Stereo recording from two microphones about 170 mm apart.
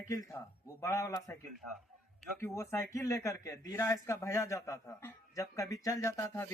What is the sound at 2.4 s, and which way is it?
A man's voice, 15° left (ahead or behind).